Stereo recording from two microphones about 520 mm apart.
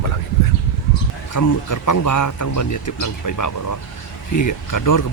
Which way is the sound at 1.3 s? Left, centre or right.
Left.